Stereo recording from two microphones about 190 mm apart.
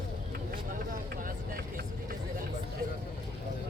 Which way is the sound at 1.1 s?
50° right (ahead or behind).